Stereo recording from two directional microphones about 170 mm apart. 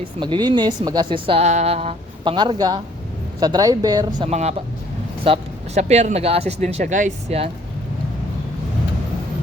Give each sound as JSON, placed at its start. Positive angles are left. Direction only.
{"t": 0.2, "sound": "speech", "side_deg": -25}
{"t": 4.2, "sound": "speech", "side_deg": -40}